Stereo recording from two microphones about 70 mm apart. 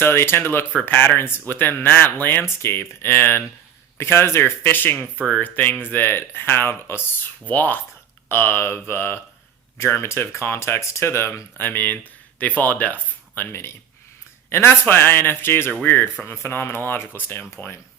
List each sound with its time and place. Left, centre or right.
0.0 s speech: left
7.4 s speech: left
13.5 s speech: left